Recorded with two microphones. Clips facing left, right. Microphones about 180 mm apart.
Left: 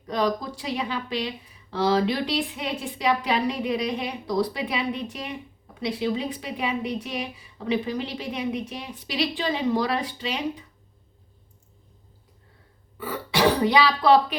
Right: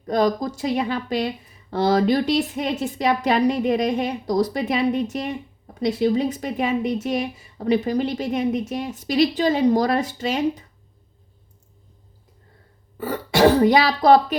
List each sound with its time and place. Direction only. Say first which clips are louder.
0.0 s speech: right 5 dB; 45° right (ahead or behind)
13.0 s speech: right 6 dB; 45° right (ahead or behind)